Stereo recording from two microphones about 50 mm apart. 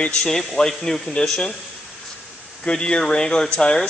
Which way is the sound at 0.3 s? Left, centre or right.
Centre.